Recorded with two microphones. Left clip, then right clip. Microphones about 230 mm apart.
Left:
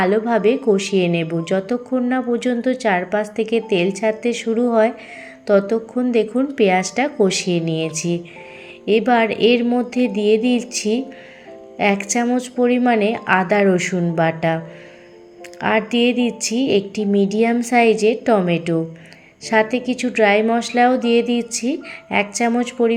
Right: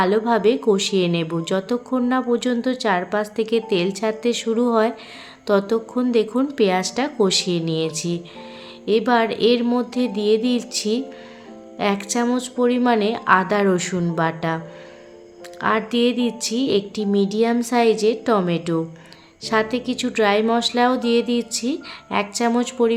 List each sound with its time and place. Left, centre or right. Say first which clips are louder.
0.0 s speech: left 1 dB; centre
15.6 s speech: left 2 dB; centre